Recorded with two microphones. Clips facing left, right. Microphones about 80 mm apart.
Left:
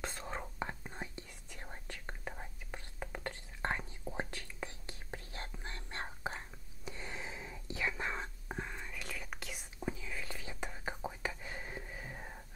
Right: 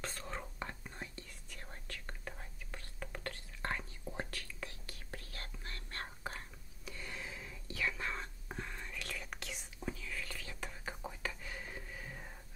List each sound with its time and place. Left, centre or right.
0.0 s whispering: centre